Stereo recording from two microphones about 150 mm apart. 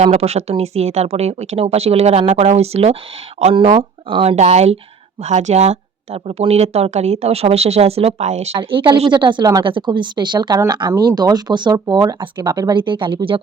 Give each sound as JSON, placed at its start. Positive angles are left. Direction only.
{"t": 0.0, "sound": "speech", "side_deg": -45}